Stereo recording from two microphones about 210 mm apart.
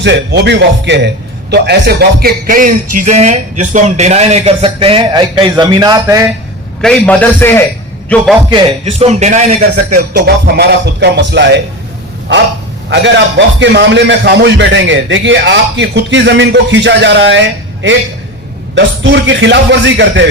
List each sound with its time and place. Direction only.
0.0 s a man's voice: 55° right (ahead or behind); by 6.2 s 15° right (ahead or behind)
6.8 s a man's voice: 5° left (ahead or behind)
8.4 s a man's voice: 25° right (ahead or behind)
10.2 s a man's voice: 50° right (ahead or behind)
12.9 s a man's voice: 55° right (ahead or behind)
18.7 s a man's voice: 60° right (ahead or behind)